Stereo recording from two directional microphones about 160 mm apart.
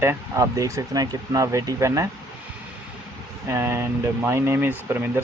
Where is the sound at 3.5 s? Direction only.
15° right (ahead or behind).